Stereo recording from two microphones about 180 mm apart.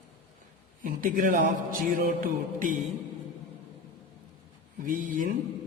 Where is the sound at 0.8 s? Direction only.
50° right (ahead or behind).